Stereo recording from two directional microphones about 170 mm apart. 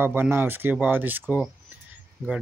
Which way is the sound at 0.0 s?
15° right (ahead or behind).